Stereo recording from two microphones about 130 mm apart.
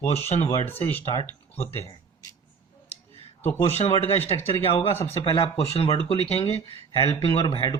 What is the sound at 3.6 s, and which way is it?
Speech, 50° left (ahead or behind).